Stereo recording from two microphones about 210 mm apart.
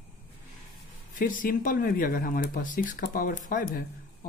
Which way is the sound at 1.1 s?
40° left (ahead or behind).